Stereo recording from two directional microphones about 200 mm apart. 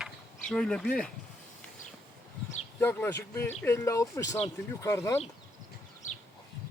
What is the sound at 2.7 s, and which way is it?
Speech, 10° left (ahead or behind).